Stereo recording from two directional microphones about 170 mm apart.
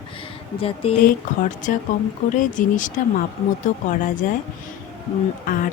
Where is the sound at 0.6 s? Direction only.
35° left (ahead or behind).